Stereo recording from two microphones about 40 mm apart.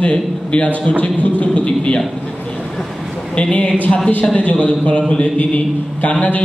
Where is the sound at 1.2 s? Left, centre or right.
Left.